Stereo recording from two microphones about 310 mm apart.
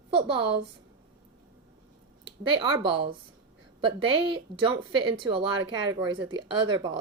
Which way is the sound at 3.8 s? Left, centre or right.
Centre.